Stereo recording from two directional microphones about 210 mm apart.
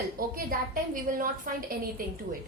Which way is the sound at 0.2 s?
40° right (ahead or behind).